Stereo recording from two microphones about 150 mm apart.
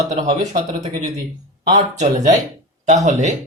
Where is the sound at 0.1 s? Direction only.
50° right (ahead or behind).